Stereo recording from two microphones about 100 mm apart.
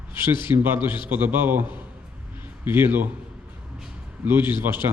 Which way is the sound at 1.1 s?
20° right (ahead or behind).